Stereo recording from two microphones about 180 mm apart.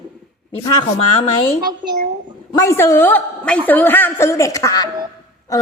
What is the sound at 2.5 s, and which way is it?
A woman's voice, 15° left (ahead or behind).